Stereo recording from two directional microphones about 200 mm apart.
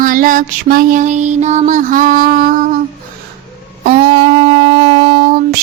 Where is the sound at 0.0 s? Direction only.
40° right (ahead or behind).